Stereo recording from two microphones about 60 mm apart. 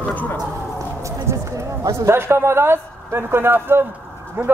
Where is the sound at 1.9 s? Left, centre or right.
Right.